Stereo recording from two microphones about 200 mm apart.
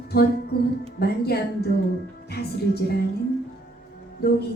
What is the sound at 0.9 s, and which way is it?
Speech, 50° left (ahead or behind).